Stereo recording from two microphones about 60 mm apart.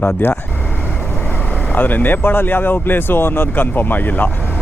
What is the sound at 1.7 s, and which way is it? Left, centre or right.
Speech, left.